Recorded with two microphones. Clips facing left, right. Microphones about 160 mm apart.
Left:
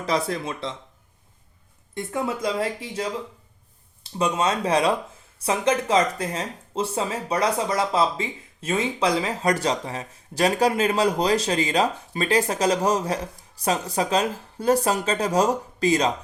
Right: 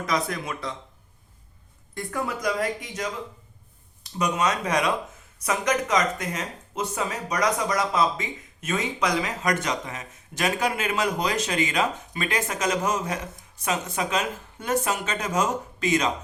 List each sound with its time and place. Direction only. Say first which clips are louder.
0.0 s speech: left 3 dB; 30° left (ahead or behind)
2.0 s speech: left 3 dB; 25° left (ahead or behind)